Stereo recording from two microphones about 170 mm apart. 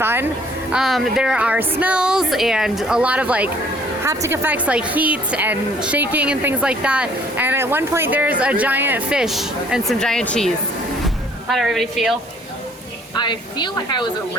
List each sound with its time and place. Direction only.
0.0 s a sound: 15° right (ahead or behind)
0.7 s a woman's voice: centre (ahead or behind)
11.0 s music: centre (ahead or behind)
13.1 s speech: 25° left (ahead or behind)